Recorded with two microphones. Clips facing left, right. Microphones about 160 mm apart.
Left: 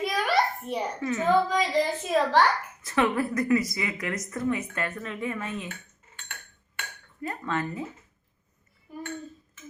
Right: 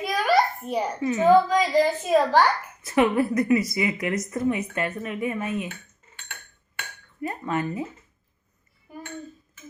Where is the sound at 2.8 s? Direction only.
20° right (ahead or behind).